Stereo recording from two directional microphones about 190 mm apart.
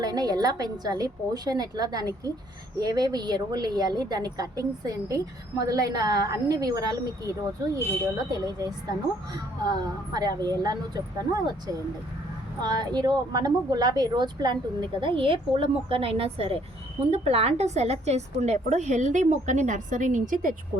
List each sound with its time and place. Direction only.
0.0 s a woman's voice: 20° right (ahead or behind)
12.6 s a woman's voice: 20° right (ahead or behind); by 20.6 s 45° right (ahead or behind)